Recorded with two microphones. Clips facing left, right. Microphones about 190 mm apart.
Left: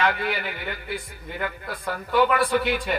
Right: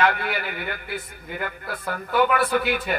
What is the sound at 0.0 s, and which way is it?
A man's voice, 55° right (ahead or behind).